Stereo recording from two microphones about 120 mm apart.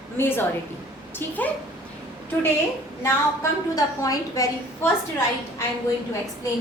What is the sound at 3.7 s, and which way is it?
Speech, 30° left (ahead or behind).